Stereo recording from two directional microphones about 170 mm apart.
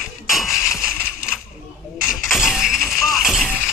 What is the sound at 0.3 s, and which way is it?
Music, centre (ahead or behind).